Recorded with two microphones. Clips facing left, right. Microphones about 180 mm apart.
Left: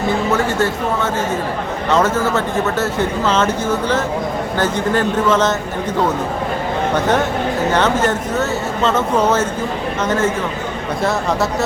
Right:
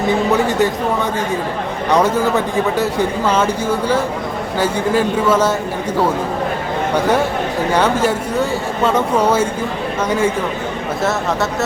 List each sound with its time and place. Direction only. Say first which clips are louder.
0.1 s a sound: right 2 dB; 15° right (ahead or behind)
1.9 s speech: right 1 dB; 15° right (ahead or behind)
7.7 s speech: right 2 dB; 10° right (ahead or behind)